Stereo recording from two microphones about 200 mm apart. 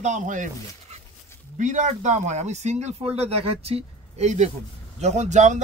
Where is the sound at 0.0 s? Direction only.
40° right (ahead or behind).